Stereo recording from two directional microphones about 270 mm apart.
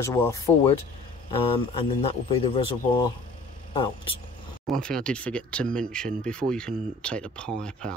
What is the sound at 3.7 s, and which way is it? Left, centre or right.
Speech, centre.